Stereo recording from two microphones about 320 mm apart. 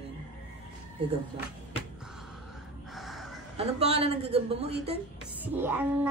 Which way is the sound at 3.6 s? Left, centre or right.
Centre.